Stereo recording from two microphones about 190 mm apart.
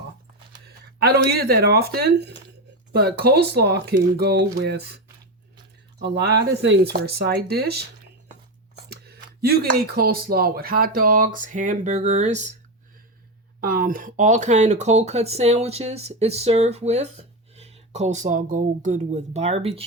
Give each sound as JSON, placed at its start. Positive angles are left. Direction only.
{"t": 1.0, "sound": "speech", "side_deg": -55}
{"t": 6.0, "sound": "speech", "side_deg": -60}
{"t": 8.9, "sound": "speech", "side_deg": -55}
{"t": 13.6, "sound": "speech", "side_deg": -50}